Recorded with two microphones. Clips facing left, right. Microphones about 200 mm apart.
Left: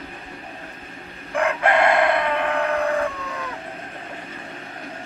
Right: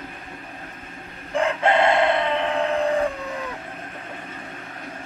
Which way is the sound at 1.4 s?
25° right (ahead or behind).